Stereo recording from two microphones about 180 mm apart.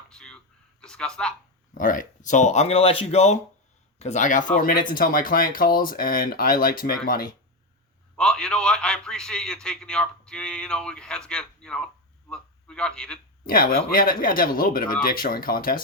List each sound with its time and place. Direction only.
0.1 s a sound: 5° left (ahead or behind)
0.8 s a man's voice: 5° left (ahead or behind)
1.7 s speech: 50° left (ahead or behind)
8.1 s a man's voice: 5° left (ahead or behind)
13.4 s speech: 55° left (ahead or behind)